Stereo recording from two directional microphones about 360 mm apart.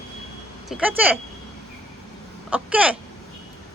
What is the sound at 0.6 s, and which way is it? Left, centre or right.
Speech, centre.